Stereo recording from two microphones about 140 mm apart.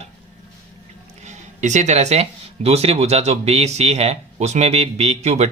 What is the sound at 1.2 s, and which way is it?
Speech, 55° right (ahead or behind).